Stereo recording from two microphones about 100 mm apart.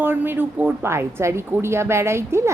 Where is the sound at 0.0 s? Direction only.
20° right (ahead or behind).